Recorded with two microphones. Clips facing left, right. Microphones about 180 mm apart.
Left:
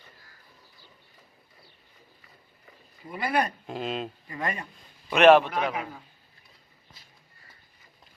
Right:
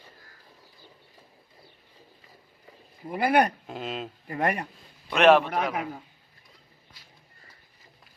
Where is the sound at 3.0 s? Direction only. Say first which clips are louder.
Right 5 dB; 55° right (ahead or behind).